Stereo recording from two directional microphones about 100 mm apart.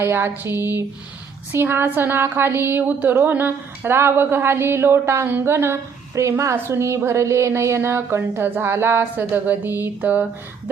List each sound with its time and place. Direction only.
0.0 s speech: 25° right (ahead or behind)